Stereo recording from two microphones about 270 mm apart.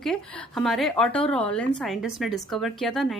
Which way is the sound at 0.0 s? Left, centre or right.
Centre.